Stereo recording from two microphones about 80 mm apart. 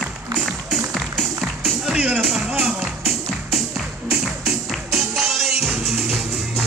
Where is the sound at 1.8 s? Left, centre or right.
Centre.